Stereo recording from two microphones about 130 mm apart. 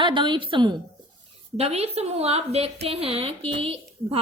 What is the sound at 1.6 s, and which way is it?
A woman's voice, 55° right (ahead or behind).